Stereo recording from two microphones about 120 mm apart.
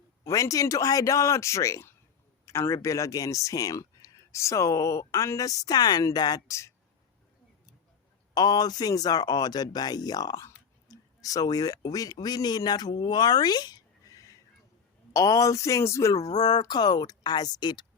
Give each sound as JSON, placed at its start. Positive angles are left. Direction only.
{"t": 0.3, "sound": "speech", "side_deg": 25}
{"t": 8.4, "sound": "speech", "side_deg": 35}